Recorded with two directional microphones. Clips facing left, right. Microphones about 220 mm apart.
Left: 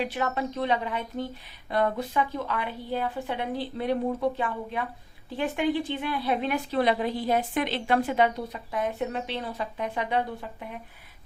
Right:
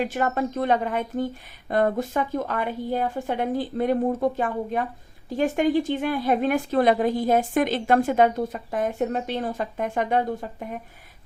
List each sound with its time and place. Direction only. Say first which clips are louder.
0.0 s a woman's voice: right 4 dB; 45° right (ahead or behind)